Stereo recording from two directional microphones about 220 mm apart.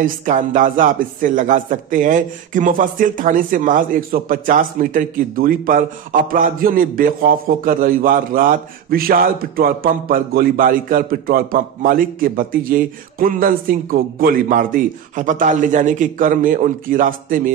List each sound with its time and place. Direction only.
0.0 s speech: 35° right (ahead or behind)